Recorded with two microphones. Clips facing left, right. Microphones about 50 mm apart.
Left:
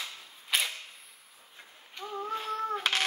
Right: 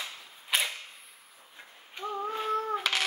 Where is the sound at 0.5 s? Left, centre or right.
Centre.